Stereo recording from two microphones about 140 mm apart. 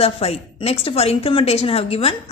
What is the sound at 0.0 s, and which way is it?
A woman's voice, 45° left (ahead or behind).